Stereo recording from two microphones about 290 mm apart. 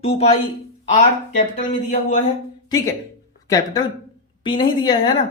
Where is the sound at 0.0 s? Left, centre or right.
Left.